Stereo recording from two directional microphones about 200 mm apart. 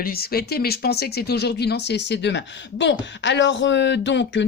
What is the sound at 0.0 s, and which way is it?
Speech, 50° left (ahead or behind).